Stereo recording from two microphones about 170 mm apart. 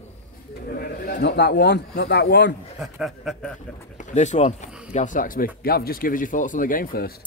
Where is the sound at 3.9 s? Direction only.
45° left (ahead or behind).